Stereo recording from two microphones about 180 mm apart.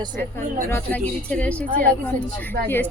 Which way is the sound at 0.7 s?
10° left (ahead or behind).